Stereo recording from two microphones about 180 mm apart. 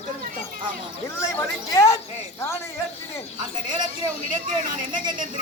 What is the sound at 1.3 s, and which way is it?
A man's voice, 15° left (ahead or behind).